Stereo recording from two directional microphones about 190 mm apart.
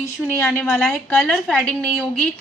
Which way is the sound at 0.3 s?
10° left (ahead or behind).